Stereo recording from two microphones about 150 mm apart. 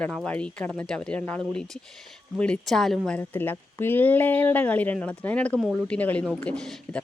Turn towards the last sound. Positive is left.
turn(degrees=5)  # may be behind; listen again after turning